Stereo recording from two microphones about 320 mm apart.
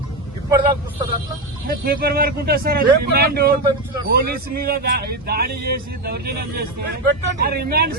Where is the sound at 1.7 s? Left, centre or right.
Right.